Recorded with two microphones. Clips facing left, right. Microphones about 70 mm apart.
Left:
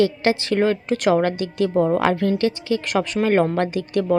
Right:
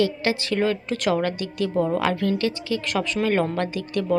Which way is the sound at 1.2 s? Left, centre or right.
Left.